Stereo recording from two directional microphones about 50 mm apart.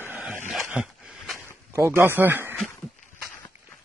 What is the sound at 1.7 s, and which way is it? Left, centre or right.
Speech, right.